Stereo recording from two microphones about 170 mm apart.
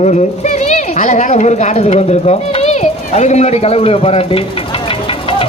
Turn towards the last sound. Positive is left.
turn(degrees=35)  # may be behind; listen again after turning